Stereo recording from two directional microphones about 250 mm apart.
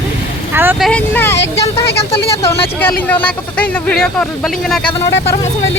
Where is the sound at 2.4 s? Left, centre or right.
Left.